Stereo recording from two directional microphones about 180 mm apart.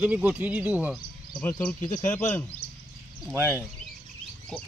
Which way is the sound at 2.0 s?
45° left (ahead or behind).